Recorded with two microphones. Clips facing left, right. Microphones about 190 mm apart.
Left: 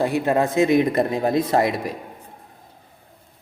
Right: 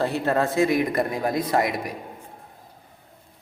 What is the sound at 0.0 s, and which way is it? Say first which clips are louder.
Speech: left 3 dB; 15° left (ahead or behind).